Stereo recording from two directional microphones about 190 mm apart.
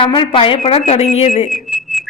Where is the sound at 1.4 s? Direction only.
Centre (ahead or behind).